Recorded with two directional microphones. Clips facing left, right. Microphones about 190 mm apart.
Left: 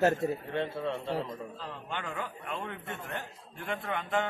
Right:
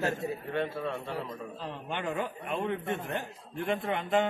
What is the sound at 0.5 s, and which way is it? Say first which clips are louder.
Speech: even; 20° left (ahead or behind).